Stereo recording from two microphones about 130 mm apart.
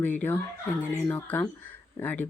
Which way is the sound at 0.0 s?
15° left (ahead or behind).